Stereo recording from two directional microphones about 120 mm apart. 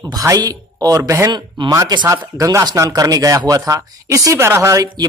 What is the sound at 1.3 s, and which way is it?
Speech, 35° right (ahead or behind).